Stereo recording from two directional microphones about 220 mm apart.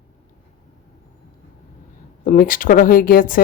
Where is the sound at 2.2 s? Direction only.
35° left (ahead or behind).